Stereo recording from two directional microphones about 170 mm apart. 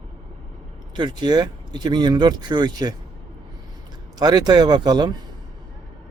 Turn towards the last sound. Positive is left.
turn(degrees=-25)  # may be behind; listen again after turning